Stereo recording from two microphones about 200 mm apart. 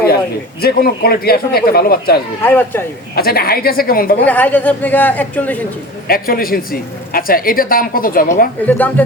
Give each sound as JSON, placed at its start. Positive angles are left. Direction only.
{"t": 0.6, "sound": "speech", "side_deg": 50}
{"t": 2.4, "sound": "speech", "side_deg": 10}
{"t": 3.2, "sound": "speech", "side_deg": 50}
{"t": 4.3, "sound": "speech", "side_deg": 10}
{"t": 6.1, "sound": "speech", "side_deg": 45}
{"t": 8.6, "sound": "speech", "side_deg": 10}